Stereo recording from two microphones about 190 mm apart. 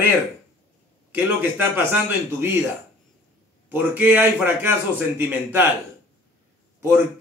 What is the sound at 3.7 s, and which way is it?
Speech, 10° right (ahead or behind).